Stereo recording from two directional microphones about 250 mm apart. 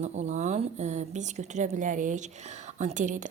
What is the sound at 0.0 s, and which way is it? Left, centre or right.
A woman's voice, right.